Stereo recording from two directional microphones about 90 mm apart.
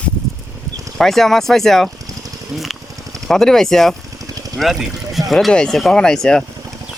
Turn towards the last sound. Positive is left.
turn(degrees=10)  # may be behind; listen again after turning